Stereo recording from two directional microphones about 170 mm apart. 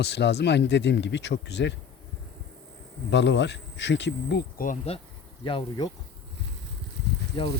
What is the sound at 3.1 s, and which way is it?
Speech, 90° left.